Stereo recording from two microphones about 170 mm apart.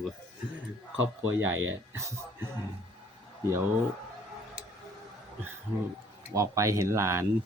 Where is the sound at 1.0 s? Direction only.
10° right (ahead or behind).